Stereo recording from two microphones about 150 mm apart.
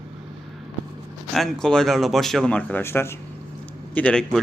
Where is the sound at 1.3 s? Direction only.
Centre (ahead or behind).